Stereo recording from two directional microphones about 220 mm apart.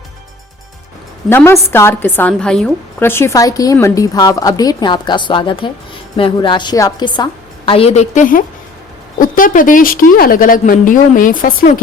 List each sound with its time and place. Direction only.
1.3 s a woman's voice: 10° left (ahead or behind); by 11.8 s 35° left (ahead or behind)